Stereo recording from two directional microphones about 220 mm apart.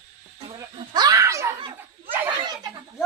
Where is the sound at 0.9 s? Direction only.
15° right (ahead or behind).